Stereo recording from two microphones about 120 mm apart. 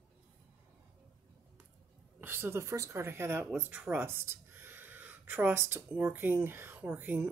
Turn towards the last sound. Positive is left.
turn(degrees=-15)  # may be behind; listen again after turning